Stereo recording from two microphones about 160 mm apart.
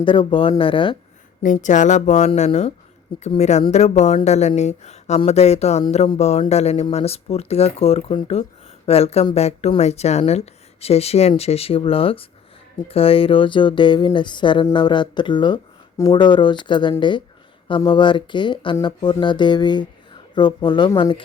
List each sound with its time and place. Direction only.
0.0 s speech: 30° left (ahead or behind)
1.4 s speech: 50° left (ahead or behind); by 12.3 s 35° left (ahead or behind)
12.9 s a sound: 35° left (ahead or behind)